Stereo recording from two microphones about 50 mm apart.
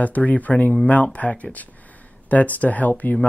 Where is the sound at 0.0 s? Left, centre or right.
Left.